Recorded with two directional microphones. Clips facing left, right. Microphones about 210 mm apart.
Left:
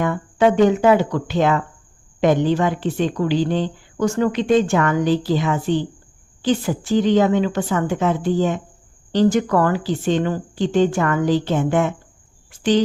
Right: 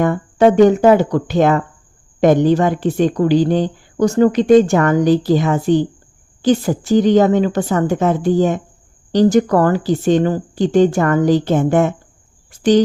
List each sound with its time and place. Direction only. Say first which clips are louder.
0.0 s a woman's voice: right 5 dB; 45° right (ahead or behind)